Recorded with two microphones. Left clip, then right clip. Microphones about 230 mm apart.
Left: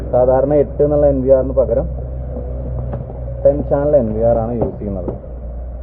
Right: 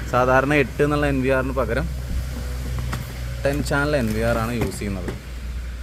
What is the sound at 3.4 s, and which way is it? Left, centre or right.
Speech, right.